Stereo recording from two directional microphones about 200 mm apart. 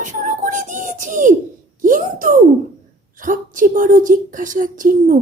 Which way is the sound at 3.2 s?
40° right (ahead or behind).